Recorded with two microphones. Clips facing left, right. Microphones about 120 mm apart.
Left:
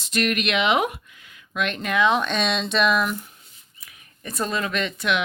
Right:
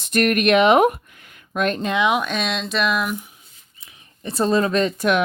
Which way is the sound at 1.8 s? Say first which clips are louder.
Right 2 dB; 25° right (ahead or behind).